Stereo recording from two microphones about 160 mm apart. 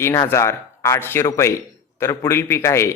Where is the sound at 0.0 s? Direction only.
15° left (ahead or behind).